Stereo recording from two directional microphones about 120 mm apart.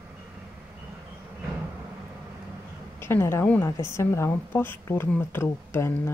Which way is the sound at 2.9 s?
20° left (ahead or behind).